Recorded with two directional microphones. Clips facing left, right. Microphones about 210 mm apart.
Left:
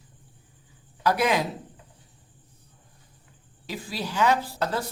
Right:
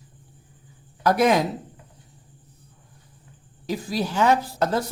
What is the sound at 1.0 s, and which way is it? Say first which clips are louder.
Speech: right 5 dB; 45° right (ahead or behind).